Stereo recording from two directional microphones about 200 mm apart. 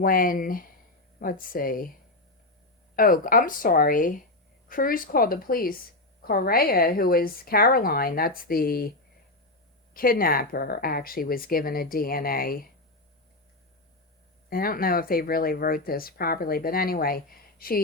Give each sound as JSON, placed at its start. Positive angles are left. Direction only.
{"t": 0.0, "sound": "speech", "side_deg": 45}
{"t": 2.9, "sound": "speech", "side_deg": 45}
{"t": 9.9, "sound": "speech", "side_deg": 45}
{"t": 14.5, "sound": "speech", "side_deg": 45}